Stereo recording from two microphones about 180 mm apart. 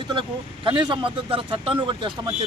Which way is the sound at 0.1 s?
25° right (ahead or behind).